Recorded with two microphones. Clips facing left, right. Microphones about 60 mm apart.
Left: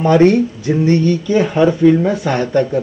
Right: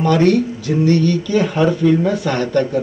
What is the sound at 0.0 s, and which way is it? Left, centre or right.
Speech, left.